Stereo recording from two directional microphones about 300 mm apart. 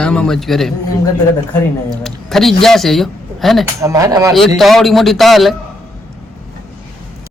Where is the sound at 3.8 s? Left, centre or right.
Centre.